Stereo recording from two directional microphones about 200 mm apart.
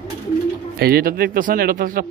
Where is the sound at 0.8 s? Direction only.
50° right (ahead or behind).